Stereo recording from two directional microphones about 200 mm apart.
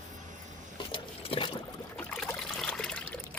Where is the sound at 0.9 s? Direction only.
25° left (ahead or behind).